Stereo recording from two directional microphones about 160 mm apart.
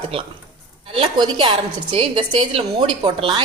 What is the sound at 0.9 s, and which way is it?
A woman's voice, 30° right (ahead or behind).